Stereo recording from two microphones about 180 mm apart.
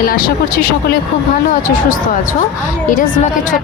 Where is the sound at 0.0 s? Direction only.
55° left (ahead or behind).